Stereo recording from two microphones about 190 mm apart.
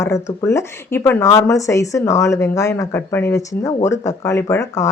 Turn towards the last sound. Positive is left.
turn(degrees=15)  # may be behind; listen again after turning